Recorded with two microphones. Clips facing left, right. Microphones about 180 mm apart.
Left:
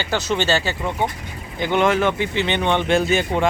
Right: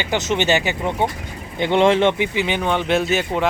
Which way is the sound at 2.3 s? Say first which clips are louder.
Even; 5° right (ahead or behind).